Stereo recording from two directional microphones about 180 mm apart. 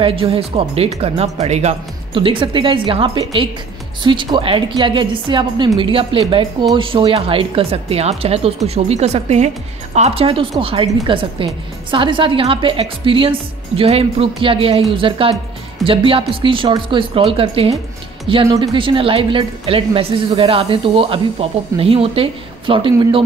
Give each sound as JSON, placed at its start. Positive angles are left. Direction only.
{"t": 0.0, "sound": "a woman's voice", "side_deg": -30}